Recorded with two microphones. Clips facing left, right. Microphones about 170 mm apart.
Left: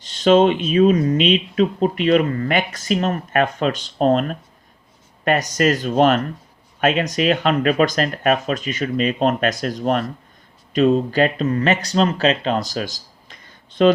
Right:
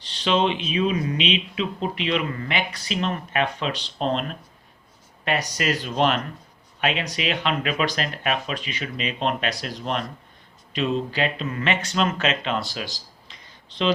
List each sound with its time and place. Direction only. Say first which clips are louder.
0.0 s speech: left 8 dB; 45° left (ahead or behind)